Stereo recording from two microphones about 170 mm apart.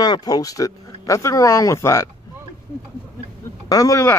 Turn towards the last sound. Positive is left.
turn(degrees=15)  # may be behind; listen again after turning